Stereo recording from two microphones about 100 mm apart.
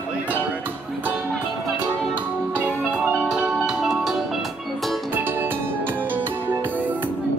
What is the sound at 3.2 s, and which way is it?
Music, 5° right (ahead or behind).